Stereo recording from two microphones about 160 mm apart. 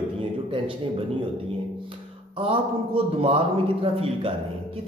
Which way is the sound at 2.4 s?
35° right (ahead or behind).